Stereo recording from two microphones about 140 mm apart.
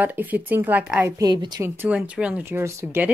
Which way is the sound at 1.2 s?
30° right (ahead or behind).